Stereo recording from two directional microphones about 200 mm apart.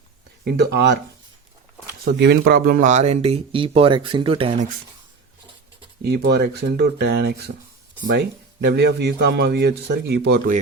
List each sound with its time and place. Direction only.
0.4 s a man's voice: 55° right (ahead or behind)
2.0 s speech: 55° right (ahead or behind); by 4.6 s 30° right (ahead or behind)
6.0 s speech: 55° right (ahead or behind)
8.6 s a man's voice: 55° right (ahead or behind)